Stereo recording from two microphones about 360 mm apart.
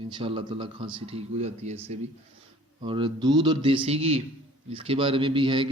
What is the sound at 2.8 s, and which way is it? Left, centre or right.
Speech, centre.